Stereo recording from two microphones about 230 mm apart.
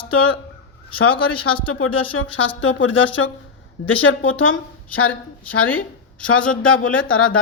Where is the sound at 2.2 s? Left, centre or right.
Left.